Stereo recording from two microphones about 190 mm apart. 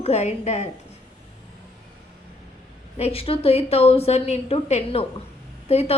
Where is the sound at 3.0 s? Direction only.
30° left (ahead or behind).